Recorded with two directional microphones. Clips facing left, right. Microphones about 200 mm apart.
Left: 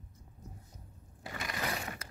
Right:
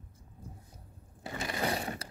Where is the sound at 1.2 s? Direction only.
25° right (ahead or behind).